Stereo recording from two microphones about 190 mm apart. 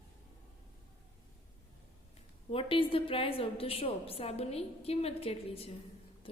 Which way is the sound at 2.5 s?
30° left (ahead or behind).